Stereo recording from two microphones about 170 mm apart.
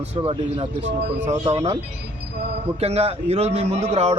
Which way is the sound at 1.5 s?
40° right (ahead or behind).